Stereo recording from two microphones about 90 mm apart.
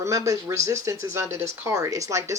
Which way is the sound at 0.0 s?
35° right (ahead or behind).